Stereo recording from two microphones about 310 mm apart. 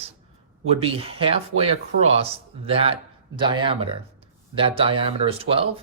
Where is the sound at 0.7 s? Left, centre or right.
Centre.